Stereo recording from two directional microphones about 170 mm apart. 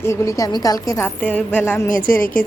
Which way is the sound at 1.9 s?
55° left (ahead or behind).